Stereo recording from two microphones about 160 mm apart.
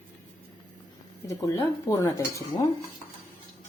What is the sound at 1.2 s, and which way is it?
Dishes, 20° left (ahead or behind).